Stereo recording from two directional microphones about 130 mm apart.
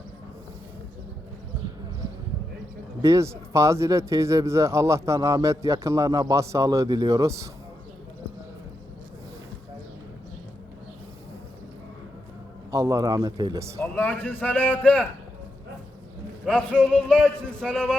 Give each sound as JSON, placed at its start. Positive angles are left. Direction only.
{"t": 3.0, "sound": "speech", "side_deg": -25}
{"t": 12.7, "sound": "speech", "side_deg": -25}
{"t": 13.8, "sound": "a man's voice", "side_deg": 15}
{"t": 16.5, "sound": "speech", "side_deg": 5}